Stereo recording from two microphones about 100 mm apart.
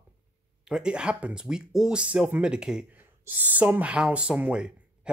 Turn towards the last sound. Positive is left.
turn(degrees=-10)  # may be behind; listen again after turning